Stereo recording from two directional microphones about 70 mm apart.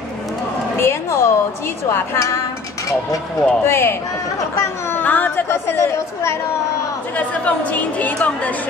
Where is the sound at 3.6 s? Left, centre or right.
Left.